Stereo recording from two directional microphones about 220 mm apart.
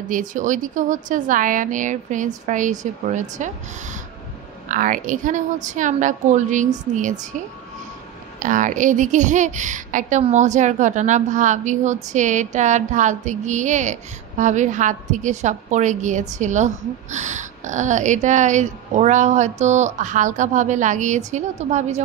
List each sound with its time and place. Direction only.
0.1 s a woman's voice: 35° right (ahead or behind)
4.6 s a woman's voice: 35° right (ahead or behind)
8.4 s a woman's voice: 35° right (ahead or behind)